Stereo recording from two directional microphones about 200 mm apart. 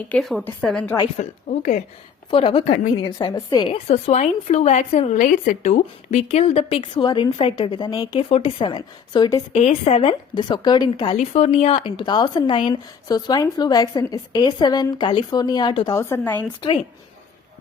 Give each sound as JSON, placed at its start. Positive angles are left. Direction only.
{"t": 0.1, "sound": "a woman's voice", "side_deg": 0}
{"t": 1.2, "sound": "a woman's voice", "side_deg": 40}
{"t": 2.3, "sound": "a woman's voice", "side_deg": 25}
{"t": 9.5, "sound": "a woman's voice", "side_deg": 35}